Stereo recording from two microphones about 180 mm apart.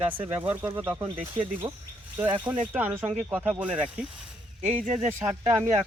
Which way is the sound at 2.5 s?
10° right (ahead or behind).